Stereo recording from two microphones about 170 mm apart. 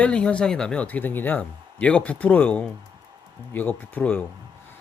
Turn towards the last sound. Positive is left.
turn(degrees=10)  # may be behind; listen again after turning